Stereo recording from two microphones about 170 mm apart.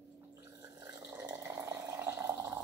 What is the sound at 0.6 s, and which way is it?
Water, 20° right (ahead or behind).